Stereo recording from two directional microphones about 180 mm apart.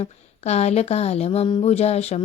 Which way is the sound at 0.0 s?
35° left (ahead or behind).